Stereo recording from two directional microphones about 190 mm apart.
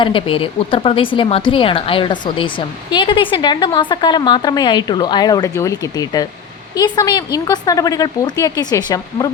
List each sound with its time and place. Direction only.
0.0 s a woman's voice: 25° left (ahead or behind)